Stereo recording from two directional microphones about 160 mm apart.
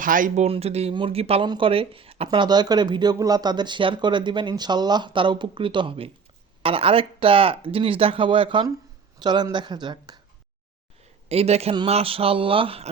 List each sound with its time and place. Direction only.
0.0 s speech: 55° right (ahead or behind)
0.4 s speech: 40° right (ahead or behind)
11.3 s speech: 40° right (ahead or behind)